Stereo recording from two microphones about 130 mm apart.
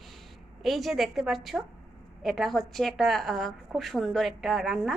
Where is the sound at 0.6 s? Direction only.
Centre (ahead or behind).